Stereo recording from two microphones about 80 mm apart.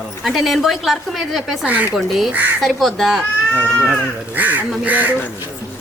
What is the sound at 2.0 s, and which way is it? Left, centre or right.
A woman's voice, centre.